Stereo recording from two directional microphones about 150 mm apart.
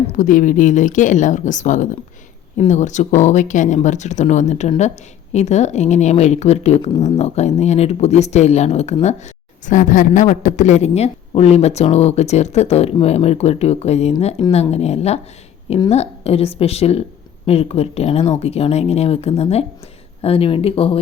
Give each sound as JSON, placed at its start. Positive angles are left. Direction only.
{"t": 0.1, "sound": "speech", "side_deg": 65}